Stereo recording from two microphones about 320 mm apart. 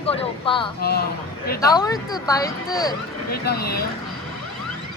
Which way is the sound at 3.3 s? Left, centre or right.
Left.